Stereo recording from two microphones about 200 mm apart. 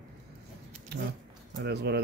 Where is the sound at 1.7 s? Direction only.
55° right (ahead or behind).